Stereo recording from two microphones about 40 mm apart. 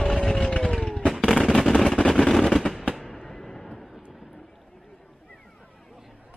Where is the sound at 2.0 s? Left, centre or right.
Centre.